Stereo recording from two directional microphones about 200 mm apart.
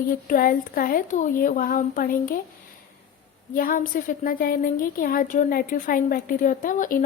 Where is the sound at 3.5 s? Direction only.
45° left (ahead or behind).